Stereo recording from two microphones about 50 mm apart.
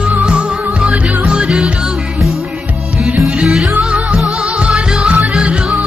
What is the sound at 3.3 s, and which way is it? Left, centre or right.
Music, centre.